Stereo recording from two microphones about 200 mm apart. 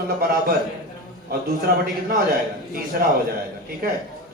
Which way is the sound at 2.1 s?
45° right (ahead or behind).